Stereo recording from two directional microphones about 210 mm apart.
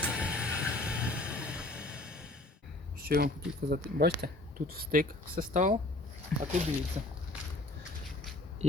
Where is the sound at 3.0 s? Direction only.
45° right (ahead or behind).